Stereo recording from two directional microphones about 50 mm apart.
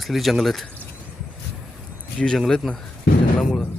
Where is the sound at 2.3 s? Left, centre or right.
Centre.